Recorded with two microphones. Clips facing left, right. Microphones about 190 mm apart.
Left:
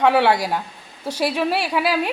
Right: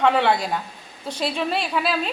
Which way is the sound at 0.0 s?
10° left (ahead or behind).